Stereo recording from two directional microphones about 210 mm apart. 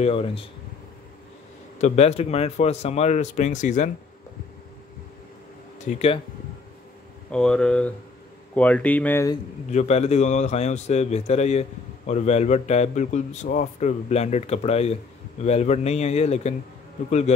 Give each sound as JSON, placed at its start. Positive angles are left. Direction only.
{"t": 0.0, "sound": "speech", "side_deg": 30}
{"t": 1.8, "sound": "speech", "side_deg": 30}
{"t": 5.9, "sound": "speech", "side_deg": 30}
{"t": 7.2, "sound": "speech", "side_deg": 5}
{"t": 9.7, "sound": "speech", "side_deg": 30}